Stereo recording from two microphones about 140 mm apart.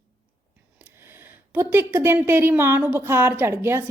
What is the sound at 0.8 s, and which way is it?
Speech, 15° right (ahead or behind).